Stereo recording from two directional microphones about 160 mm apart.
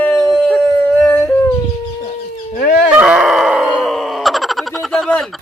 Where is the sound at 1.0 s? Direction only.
10° left (ahead or behind).